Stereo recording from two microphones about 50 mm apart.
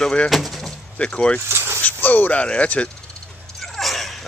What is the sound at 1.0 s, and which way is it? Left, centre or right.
Speech, left.